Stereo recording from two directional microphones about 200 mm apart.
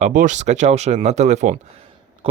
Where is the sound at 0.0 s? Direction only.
40° right (ahead or behind).